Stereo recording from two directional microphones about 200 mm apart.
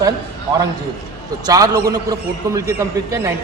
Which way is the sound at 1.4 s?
20° right (ahead or behind).